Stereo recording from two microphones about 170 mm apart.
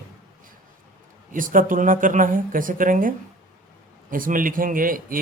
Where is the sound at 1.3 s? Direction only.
55° right (ahead or behind).